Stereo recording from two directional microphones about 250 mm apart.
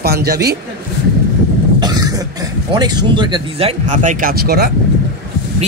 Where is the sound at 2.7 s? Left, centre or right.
Centre; by 4.7 s right.